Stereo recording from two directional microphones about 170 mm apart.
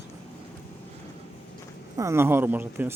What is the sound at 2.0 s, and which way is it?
Speech, 15° right (ahead or behind).